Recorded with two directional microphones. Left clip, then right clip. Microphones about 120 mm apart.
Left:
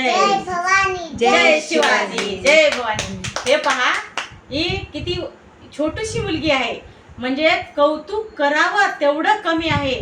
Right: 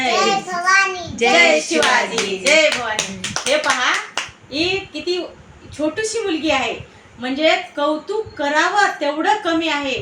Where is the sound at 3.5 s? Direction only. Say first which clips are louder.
Even; 25° left (ahead or behind).